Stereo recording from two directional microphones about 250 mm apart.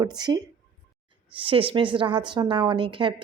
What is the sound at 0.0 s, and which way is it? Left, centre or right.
A woman's voice, centre.